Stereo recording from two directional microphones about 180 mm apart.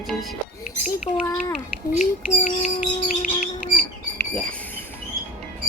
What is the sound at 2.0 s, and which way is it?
Bird, 45° left (ahead or behind).